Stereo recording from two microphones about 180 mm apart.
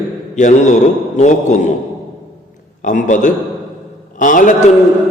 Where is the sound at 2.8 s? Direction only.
45° left (ahead or behind).